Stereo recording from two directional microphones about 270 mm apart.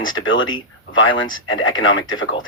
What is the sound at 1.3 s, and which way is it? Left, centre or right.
Speech, left.